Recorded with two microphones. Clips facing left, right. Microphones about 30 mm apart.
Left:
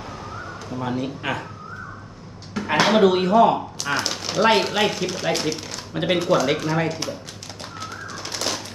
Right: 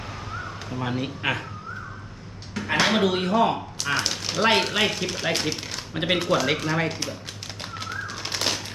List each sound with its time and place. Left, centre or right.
0.7 s speech: centre
2.6 s speech: centre
7.6 s bird: centre